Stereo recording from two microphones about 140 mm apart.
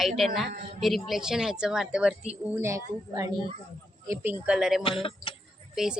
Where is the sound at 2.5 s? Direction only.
20° right (ahead or behind).